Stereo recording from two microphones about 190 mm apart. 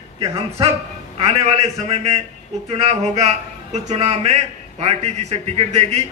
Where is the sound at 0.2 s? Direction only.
30° right (ahead or behind).